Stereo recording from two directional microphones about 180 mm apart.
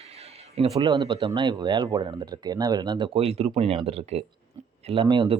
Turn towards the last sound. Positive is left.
turn(degrees=-25)  # may be behind; listen again after turning